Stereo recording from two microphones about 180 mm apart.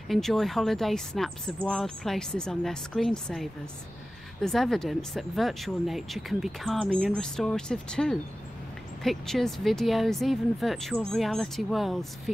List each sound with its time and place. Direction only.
0.1 s speech: centre (ahead or behind)